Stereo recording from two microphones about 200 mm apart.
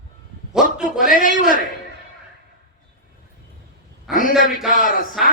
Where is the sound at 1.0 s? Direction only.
45° left (ahead or behind).